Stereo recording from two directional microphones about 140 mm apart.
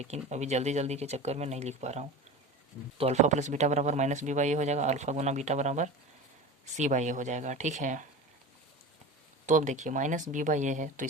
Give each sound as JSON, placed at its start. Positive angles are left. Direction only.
{"t": 0.0, "sound": "speech", "side_deg": -50}
{"t": 9.5, "sound": "speech", "side_deg": -60}